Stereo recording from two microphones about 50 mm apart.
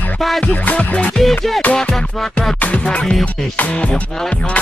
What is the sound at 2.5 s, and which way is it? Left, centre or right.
Music, left.